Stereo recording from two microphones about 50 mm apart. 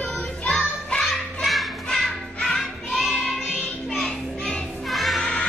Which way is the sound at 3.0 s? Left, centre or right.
Centre.